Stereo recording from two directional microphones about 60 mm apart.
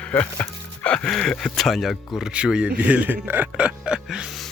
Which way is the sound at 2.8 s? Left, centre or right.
Right.